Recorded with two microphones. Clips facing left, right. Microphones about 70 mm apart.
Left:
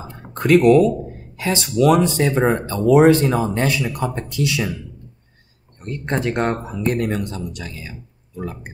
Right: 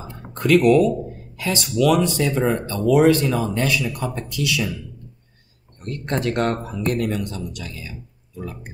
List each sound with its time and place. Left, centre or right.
0.4 s speech: left
5.8 s speech: left
7.0 s speech: left